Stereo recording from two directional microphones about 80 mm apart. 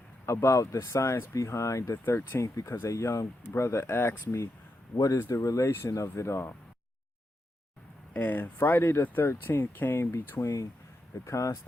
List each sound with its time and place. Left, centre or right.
0.3 s speech: left
2.4 s speech: left
8.1 s speech: left
10.4 s speech: left